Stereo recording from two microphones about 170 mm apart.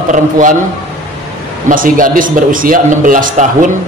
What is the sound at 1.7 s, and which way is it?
A man's voice, 55° right (ahead or behind).